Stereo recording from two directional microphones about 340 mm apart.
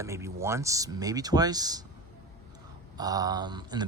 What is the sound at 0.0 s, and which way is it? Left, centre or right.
Speech, centre.